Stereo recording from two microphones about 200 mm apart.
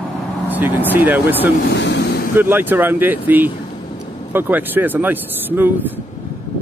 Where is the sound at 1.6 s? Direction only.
60° left (ahead or behind).